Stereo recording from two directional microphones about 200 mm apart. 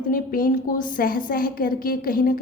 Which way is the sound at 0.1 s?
45° left (ahead or behind).